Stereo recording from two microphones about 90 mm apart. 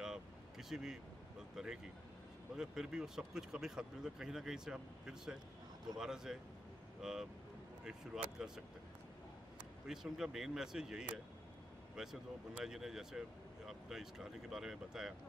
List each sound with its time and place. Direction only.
0.0 s vehicle: 5° right (ahead or behind)
2.5 s speech: 5° right (ahead or behind)
9.8 s speech: 5° right (ahead or behind)